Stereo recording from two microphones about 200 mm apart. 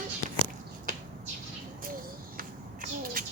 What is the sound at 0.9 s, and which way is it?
Finger snapping, 40° right (ahead or behind).